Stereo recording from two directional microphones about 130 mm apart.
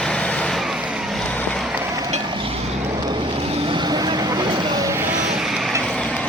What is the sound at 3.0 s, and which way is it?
Vehicle, 35° right (ahead or behind).